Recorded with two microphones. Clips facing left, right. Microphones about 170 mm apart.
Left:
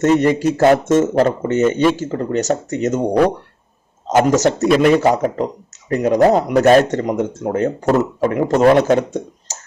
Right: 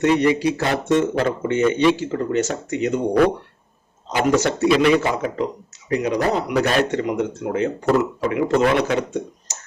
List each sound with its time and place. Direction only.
0.0 s speech: 45° left (ahead or behind)
4.0 s speech: 40° left (ahead or behind)